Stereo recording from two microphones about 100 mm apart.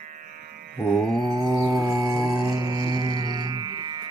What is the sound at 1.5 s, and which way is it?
Music, 30° right (ahead or behind).